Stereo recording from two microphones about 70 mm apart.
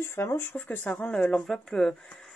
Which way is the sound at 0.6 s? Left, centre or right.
Left.